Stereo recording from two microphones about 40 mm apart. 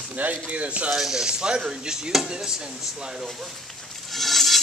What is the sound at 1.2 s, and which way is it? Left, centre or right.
Speech, right.